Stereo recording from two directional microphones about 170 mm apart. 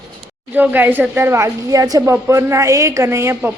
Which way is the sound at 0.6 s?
10° right (ahead or behind).